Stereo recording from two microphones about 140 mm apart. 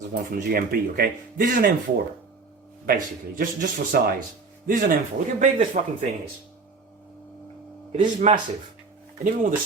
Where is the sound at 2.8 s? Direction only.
90° right.